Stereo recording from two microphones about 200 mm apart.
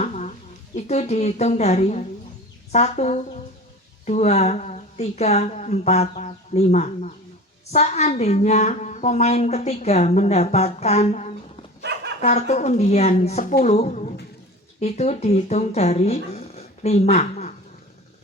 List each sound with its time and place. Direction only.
0.0 s a sound: 35° left (ahead or behind)
0.8 s a woman's voice: 35° left (ahead or behind)
11.8 s dog: 60° right (ahead or behind)
12.2 s a woman's voice: 35° left (ahead or behind)